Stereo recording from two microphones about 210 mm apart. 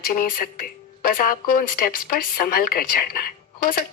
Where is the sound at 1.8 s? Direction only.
45° left (ahead or behind).